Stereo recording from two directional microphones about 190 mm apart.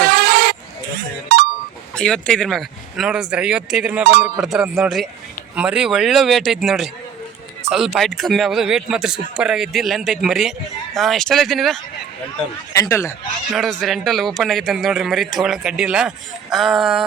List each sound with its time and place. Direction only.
0.0 s goat: 60° right (ahead or behind)
2.0 s speech: 5° left (ahead or behind)
4.0 s speech: 55° right (ahead or behind)
4.4 s speech: centre (ahead or behind)
12.7 s speech: 15° left (ahead or behind)
13.5 s speech: centre (ahead or behind)